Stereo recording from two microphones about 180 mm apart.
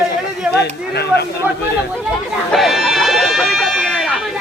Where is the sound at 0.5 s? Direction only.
65° left (ahead or behind).